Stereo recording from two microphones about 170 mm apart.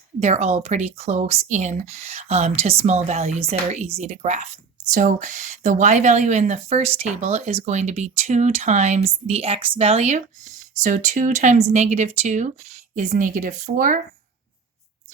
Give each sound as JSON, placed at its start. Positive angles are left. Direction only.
{"t": 0.2, "sound": "speech", "side_deg": -40}